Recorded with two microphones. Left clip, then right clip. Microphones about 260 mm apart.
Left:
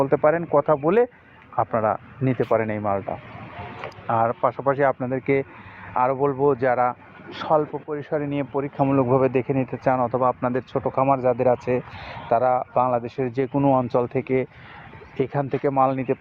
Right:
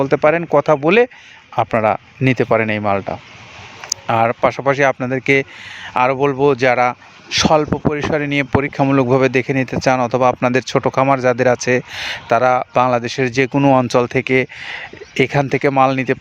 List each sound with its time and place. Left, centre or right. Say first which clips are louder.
0.0 s speech: right 5 dB; right